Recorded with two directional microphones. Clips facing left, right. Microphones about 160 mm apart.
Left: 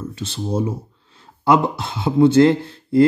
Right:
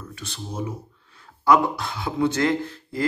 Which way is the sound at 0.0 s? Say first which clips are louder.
Left 10 dB; 25° left (ahead or behind).